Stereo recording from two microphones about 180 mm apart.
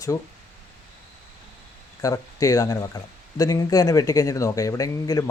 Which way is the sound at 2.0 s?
20° left (ahead or behind).